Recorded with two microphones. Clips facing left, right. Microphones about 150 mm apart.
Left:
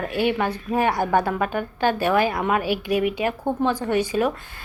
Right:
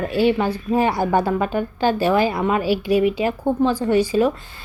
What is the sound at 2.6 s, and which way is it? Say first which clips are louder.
Speech: right 4 dB; 55° left (ahead or behind).